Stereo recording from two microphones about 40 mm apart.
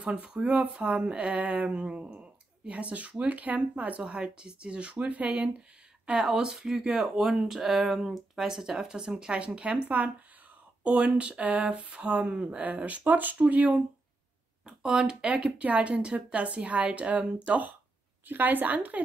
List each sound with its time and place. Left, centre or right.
0.0 s speech: right
2.7 s speech: right
4.1 s speech: right
6.2 s speech: centre
7.4 s speech: centre
9.8 s speech: right
10.8 s speech: right
13.0 s speech: right
14.7 s speech: right
18.3 s speech: right